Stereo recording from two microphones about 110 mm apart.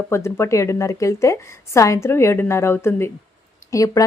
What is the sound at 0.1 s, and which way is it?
Speech, 25° left (ahead or behind).